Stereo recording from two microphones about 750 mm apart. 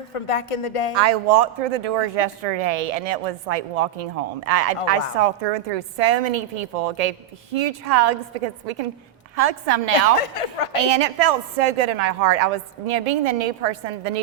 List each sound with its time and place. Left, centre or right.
0.1 s speech: left
0.9 s speech: right